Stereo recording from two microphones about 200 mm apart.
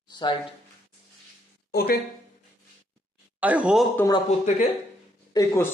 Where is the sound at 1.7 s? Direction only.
50° left (ahead or behind).